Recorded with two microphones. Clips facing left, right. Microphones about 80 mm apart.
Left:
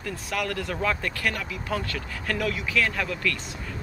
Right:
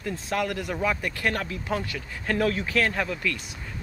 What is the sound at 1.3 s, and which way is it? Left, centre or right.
Speech, right.